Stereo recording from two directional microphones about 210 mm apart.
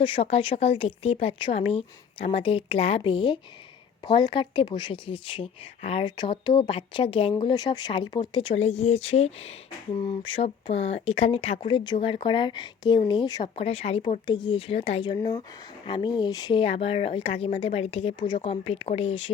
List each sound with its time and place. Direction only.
0.0 s speech: 25° left (ahead or behind)